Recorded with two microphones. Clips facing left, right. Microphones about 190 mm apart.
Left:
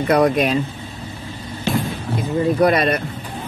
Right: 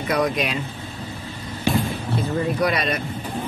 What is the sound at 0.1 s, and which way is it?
Speech, 50° left (ahead or behind).